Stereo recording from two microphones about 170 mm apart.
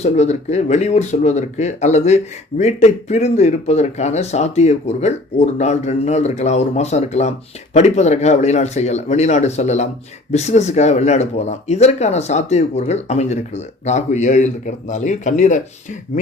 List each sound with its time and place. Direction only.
0.0 s speech: 40° left (ahead or behind)